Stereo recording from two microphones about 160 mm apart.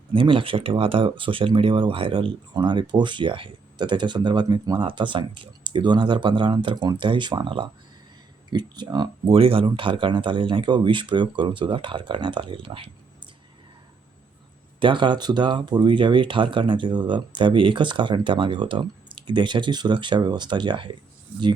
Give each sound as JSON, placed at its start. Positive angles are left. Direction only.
{"t": 0.1, "sound": "speech", "side_deg": -30}
{"t": 14.8, "sound": "speech", "side_deg": -30}